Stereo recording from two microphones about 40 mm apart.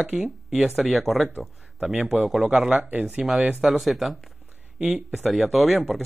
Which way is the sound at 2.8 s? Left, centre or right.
Right.